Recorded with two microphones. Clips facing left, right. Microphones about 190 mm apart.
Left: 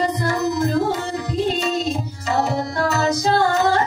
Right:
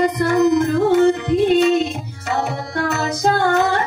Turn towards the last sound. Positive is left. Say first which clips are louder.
# right 1 dB
turn(degrees=-55)  # may be behind; listen again after turning